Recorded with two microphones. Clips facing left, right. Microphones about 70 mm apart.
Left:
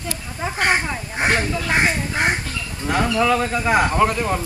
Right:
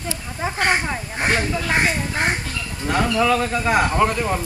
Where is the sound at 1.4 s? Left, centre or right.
Centre.